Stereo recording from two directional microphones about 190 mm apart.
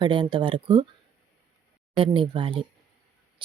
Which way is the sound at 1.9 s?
25° right (ahead or behind).